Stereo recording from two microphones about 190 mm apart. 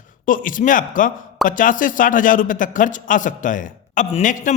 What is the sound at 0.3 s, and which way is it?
Speech, 45° left (ahead or behind).